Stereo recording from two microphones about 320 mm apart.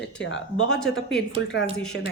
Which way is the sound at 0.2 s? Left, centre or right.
Left.